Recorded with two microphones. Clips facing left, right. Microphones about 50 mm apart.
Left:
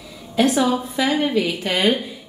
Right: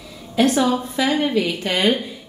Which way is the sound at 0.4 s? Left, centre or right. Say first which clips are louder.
Even; centre.